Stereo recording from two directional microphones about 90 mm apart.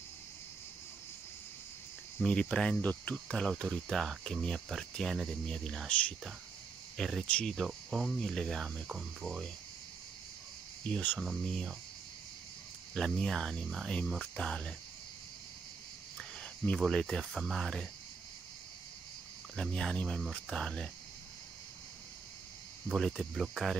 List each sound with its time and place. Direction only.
2.2 s speech: 10° left (ahead or behind)
7.0 s speech: 5° left (ahead or behind)
7.5 s speech: centre (ahead or behind)
8.8 s speech: 5° right (ahead or behind)
10.9 s speech: 20° left (ahead or behind)
11.1 s speech: 5° left (ahead or behind)
12.9 s speech: 5° left (ahead or behind)
16.2 s cricket: 10° left (ahead or behind)
16.8 s speech: 5° left (ahead or behind)
19.5 s speech: 10° left (ahead or behind)
22.8 s speech: centre (ahead or behind)